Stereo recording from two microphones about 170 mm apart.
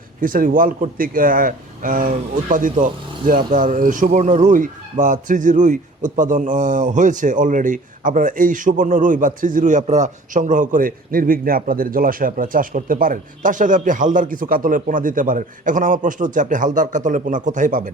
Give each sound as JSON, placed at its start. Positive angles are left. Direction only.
{"t": 0.2, "sound": "speech", "side_deg": -55}